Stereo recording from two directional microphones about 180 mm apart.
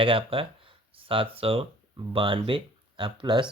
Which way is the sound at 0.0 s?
30° right (ahead or behind).